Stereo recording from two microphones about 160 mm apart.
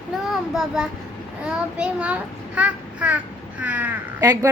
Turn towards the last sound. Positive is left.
turn(degrees=-20)  # may be behind; listen again after turning